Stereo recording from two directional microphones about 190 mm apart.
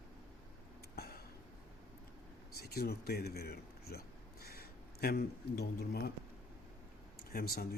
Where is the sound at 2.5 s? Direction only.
55° left (ahead or behind).